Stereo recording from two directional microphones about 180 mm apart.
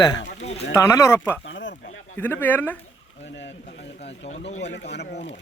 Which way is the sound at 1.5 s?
90° left.